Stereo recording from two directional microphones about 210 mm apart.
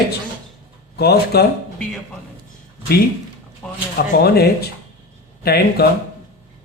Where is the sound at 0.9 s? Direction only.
50° left (ahead or behind).